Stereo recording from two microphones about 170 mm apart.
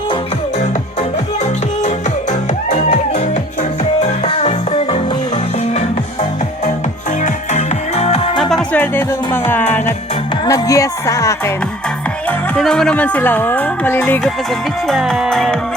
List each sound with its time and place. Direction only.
2.6 s music: 40° left (ahead or behind)
7.2 s music: 40° left (ahead or behind)
8.4 s music: centre (ahead or behind)
10.4 s speech: 20° left (ahead or behind)
12.5 s speech: 5° left (ahead or behind)
14.8 s music: centre (ahead or behind)